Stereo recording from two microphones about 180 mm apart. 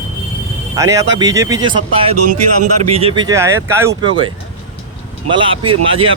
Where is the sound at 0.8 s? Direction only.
20° right (ahead or behind).